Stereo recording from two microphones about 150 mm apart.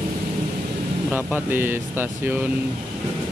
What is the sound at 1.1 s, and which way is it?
Speech, 15° right (ahead or behind).